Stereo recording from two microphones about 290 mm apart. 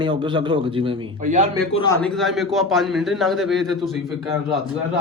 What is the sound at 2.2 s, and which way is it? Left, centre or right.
A man's voice, centre.